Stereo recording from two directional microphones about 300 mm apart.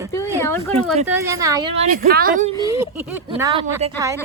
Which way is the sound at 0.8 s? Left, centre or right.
Centre.